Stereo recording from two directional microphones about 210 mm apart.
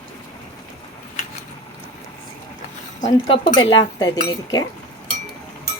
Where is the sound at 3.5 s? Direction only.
20° left (ahead or behind).